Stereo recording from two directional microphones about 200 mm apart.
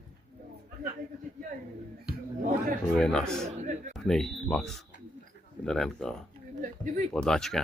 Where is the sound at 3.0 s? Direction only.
5° left (ahead or behind).